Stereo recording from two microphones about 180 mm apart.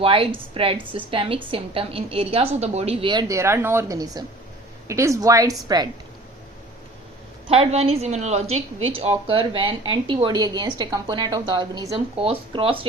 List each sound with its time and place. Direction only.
0.0 s a woman's voice: 30° right (ahead or behind)
7.4 s a woman's voice: 35° right (ahead or behind)